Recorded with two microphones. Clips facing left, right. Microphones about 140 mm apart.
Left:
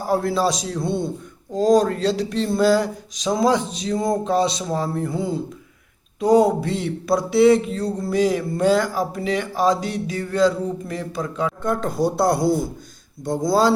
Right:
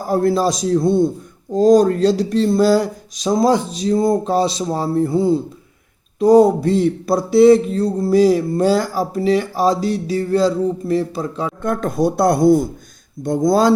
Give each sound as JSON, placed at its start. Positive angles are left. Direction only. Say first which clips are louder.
{"t": 0.1, "sound": "speech", "louder": "right 4 dB", "side_deg": -45}
{"t": 11.6, "sound": "speech", "louder": "right 5 dB", "side_deg": -50}